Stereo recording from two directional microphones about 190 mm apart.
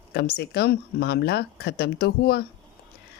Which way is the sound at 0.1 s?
60° left (ahead or behind).